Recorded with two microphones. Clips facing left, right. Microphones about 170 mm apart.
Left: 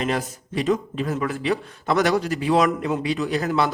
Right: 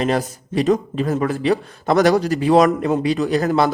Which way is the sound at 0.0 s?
35° right (ahead or behind).